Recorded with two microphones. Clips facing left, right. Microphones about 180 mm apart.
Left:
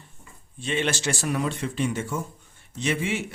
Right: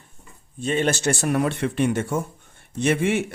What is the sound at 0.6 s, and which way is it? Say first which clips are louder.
Speech: right 5 dB; 45° right (ahead or behind).